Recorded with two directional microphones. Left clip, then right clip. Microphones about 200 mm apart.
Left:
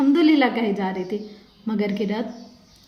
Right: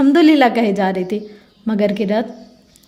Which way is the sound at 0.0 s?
55° right (ahead or behind).